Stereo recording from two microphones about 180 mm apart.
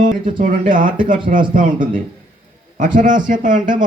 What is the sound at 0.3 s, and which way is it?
A man's voice, 50° right (ahead or behind).